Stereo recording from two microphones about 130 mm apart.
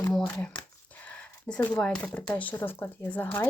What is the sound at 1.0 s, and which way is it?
Speech, 10° left (ahead or behind).